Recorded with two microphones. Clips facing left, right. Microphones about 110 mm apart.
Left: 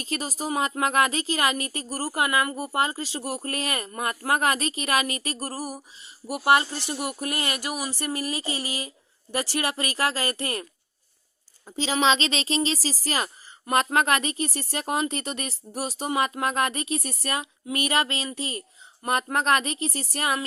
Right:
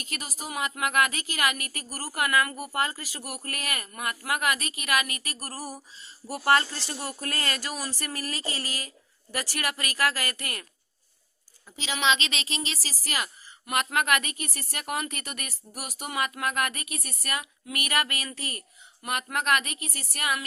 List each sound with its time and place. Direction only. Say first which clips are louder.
0.0 s speech: left 8 dB; 30° left (ahead or behind)
5.6 s speech: left 4 dB; 15° left (ahead or behind)
19.0 s speech: left 4 dB; 35° left (ahead or behind)